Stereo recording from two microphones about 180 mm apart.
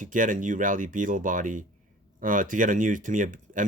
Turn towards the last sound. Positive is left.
turn(degrees=-45)  # may be behind; listen again after turning